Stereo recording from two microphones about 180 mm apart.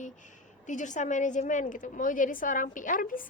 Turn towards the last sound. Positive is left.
turn(degrees=50)  # may be behind; listen again after turning